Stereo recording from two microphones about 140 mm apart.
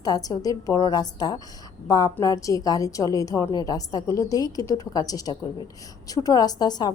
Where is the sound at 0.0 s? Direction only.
25° left (ahead or behind).